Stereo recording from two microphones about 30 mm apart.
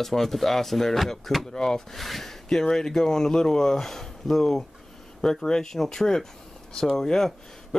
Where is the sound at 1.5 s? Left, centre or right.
Left.